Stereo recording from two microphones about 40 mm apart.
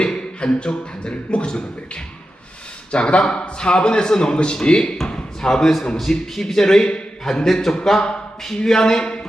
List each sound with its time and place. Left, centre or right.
0.0 s beatboxing: left
2.9 s a man's voice: left
5.0 s a sound: left
5.5 s speech: centre